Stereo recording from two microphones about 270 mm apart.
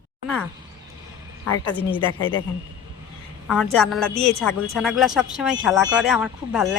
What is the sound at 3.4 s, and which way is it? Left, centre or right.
Speech, centre.